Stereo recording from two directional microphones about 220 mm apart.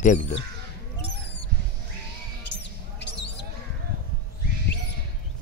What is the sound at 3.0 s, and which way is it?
Basketball bounce, 50° left (ahead or behind).